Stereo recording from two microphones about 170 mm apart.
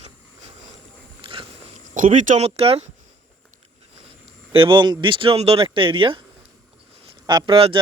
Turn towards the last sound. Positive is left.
turn(degrees=-30)  # may be behind; listen again after turning